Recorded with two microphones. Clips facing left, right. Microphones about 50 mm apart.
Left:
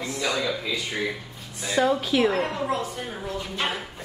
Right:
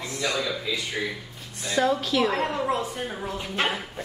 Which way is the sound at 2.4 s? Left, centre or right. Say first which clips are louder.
Right 1 dB; right.